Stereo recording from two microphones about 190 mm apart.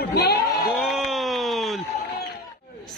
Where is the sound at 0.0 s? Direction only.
55° left (ahead or behind).